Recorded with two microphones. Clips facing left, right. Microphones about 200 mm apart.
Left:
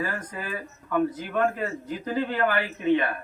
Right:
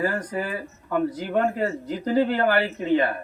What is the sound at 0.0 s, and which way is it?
Speech, 35° right (ahead or behind).